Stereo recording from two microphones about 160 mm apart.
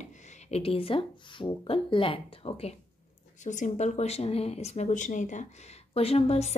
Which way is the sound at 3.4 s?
50° left (ahead or behind).